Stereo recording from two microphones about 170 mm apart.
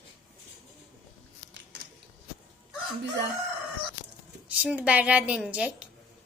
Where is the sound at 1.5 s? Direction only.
90° right.